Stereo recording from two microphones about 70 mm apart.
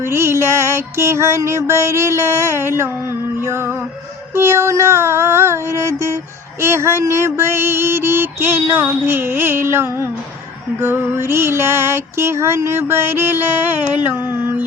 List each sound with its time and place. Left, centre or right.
0.0 s music: right